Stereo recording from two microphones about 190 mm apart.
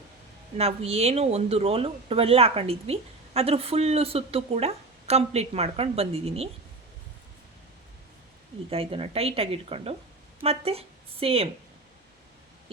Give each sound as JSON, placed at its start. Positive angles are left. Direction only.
{"t": 0.5, "sound": "speech", "side_deg": -30}
{"t": 8.7, "sound": "speech", "side_deg": -30}